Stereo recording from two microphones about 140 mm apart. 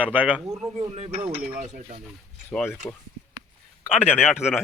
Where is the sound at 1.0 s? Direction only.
45° right (ahead or behind).